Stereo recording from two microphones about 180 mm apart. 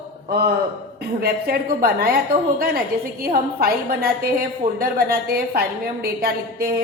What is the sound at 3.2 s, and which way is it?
A woman's voice, 55° right (ahead or behind).